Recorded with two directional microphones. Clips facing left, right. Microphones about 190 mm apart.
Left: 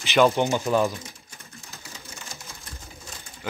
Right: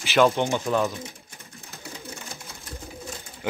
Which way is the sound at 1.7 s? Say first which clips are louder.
Right 7 dB; 60° right (ahead or behind).